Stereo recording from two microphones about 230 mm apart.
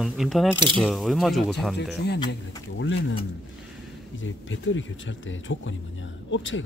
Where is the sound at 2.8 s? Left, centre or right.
Left.